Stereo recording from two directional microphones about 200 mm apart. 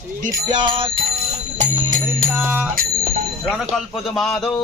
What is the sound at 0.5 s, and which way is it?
Music, 25° right (ahead or behind).